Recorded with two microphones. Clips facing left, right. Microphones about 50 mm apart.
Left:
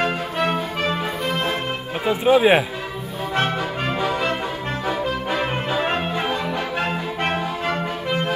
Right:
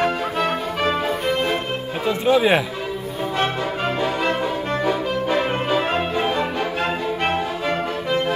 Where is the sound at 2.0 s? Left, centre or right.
Centre.